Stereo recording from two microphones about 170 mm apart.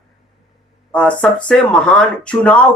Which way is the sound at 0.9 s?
5° left (ahead or behind).